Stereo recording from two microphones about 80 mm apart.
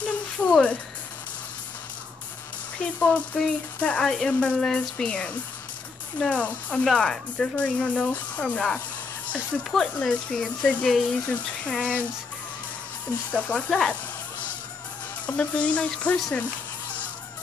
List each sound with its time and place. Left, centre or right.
0.0 s a sound: centre
3.0 s speech: centre
9.6 s speech: centre
13.3 s speech: centre
13.7 s speech: centre
15.2 s speech: centre